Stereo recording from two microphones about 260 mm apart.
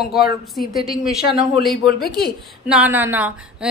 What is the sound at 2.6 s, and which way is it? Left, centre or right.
A woman's voice, centre.